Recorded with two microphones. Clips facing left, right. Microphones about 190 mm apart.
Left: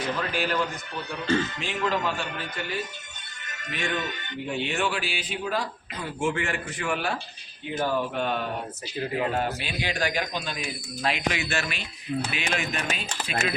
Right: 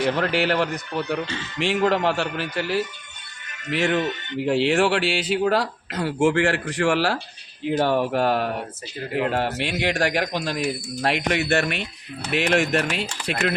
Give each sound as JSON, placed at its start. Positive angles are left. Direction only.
{"t": 0.0, "sound": "a man's voice", "side_deg": -75}